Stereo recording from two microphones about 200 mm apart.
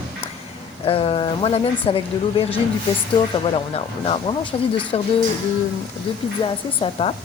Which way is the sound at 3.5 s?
30° left (ahead or behind).